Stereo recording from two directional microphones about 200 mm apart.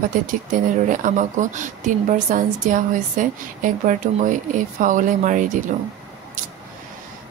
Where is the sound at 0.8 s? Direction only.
40° right (ahead or behind).